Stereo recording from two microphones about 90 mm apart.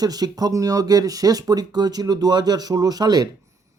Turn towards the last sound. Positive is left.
turn(degrees=-50)  # may be behind; listen again after turning